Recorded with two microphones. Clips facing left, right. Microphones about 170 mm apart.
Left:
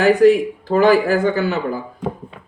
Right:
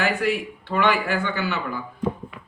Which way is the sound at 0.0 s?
35° left (ahead or behind).